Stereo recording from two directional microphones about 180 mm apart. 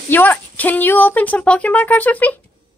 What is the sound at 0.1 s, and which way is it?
Speech, 10° left (ahead or behind).